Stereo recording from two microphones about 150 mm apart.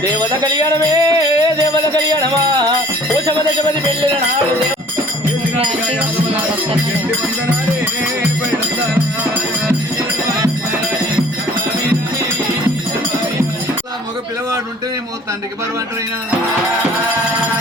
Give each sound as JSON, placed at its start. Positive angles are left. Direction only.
{"t": 0.2, "sound": "music", "side_deg": -25}
{"t": 5.5, "sound": "music", "side_deg": -40}